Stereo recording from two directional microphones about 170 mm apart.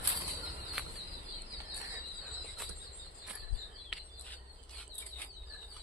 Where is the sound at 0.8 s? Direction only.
5° right (ahead or behind).